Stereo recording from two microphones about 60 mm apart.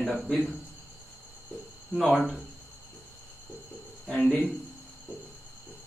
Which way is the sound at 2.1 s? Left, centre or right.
Centre.